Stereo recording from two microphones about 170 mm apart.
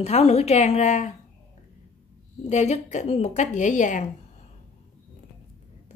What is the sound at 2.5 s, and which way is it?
A woman's voice, 40° left (ahead or behind).